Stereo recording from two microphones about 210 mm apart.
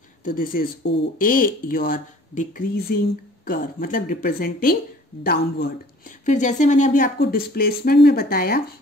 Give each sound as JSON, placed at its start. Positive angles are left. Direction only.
{"t": 0.2, "sound": "speech", "side_deg": 40}